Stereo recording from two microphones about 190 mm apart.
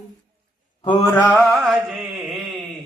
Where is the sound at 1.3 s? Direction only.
5° right (ahead or behind).